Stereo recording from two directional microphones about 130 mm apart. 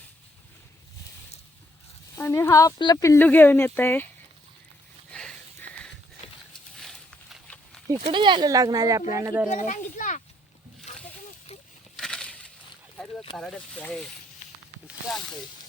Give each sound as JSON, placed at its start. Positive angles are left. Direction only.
{"t": 2.1, "sound": "speech", "side_deg": 20}
{"t": 5.1, "sound": "sniff", "side_deg": 5}
{"t": 6.7, "sound": "a sound", "side_deg": 5}
{"t": 7.9, "sound": "speech", "side_deg": -40}
{"t": 9.5, "sound": "a child's voice", "side_deg": 75}
{"t": 11.9, "sound": "crushing", "side_deg": 5}
{"t": 13.3, "sound": "speech", "side_deg": 5}